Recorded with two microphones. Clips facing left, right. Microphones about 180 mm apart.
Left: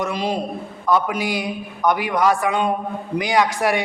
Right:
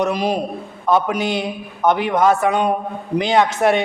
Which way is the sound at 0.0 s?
15° right (ahead or behind).